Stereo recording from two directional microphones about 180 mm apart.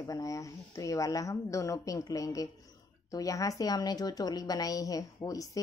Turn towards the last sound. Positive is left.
turn(degrees=20)  # may be behind; listen again after turning